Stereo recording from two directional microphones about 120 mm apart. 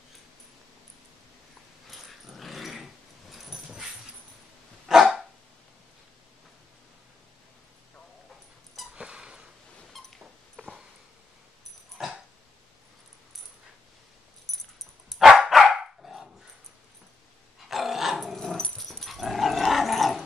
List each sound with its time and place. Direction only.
1.9 s dog: centre (ahead or behind)
8.7 s a sound: 10° right (ahead or behind)
9.9 s dog: centre (ahead or behind)
12.0 s dog: 5° right (ahead or behind)
14.5 s dog: centre (ahead or behind)
17.6 s dog: centre (ahead or behind)